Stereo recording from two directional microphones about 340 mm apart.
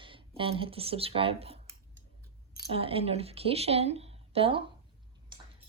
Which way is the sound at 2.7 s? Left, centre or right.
Centre.